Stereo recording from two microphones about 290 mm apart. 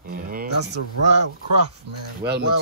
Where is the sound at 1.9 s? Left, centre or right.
Right.